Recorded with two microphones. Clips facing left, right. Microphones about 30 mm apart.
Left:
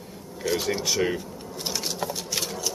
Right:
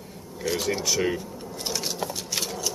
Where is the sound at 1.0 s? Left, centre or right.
Centre.